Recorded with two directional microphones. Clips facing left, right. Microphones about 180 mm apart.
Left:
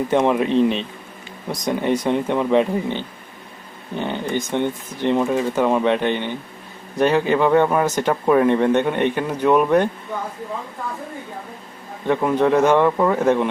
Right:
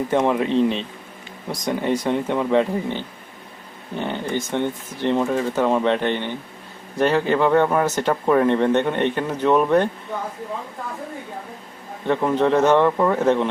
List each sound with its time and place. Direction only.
0.1 s speech: 20° left (ahead or behind)
12.0 s speech: 10° left (ahead or behind)